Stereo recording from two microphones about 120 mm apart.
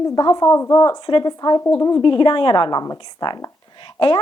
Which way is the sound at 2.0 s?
45° left (ahead or behind).